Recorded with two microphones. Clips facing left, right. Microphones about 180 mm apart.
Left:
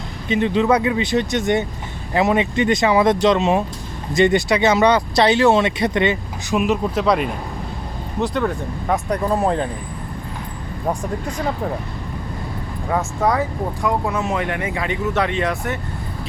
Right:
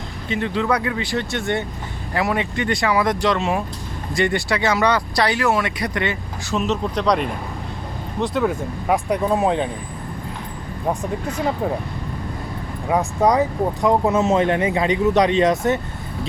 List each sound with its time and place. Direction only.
0.3 s speech: 20° left (ahead or behind); by 9.6 s centre (ahead or behind)
10.8 s speech: 10° right (ahead or behind)
12.9 s speech: 15° right (ahead or behind)